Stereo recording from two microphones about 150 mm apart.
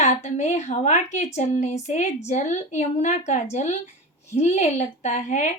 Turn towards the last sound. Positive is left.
turn(degrees=55)  # may be behind; listen again after turning